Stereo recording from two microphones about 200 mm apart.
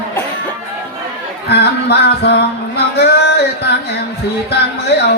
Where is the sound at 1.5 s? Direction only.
55° left (ahead or behind).